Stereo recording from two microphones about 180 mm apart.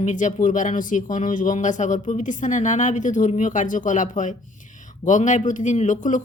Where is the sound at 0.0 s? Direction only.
45° left (ahead or behind).